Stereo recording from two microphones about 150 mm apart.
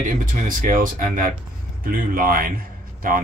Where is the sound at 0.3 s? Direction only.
65° right (ahead or behind).